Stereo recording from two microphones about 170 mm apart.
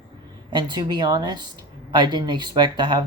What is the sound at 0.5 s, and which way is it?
Speech, 25° right (ahead or behind).